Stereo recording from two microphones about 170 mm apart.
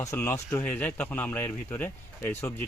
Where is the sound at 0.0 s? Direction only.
15° left (ahead or behind).